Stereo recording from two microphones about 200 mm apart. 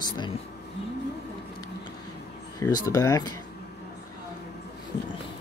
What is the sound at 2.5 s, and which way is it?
Speech, 15° left (ahead or behind).